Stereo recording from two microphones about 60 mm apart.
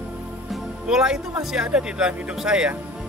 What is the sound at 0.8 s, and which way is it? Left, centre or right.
Speech, centre.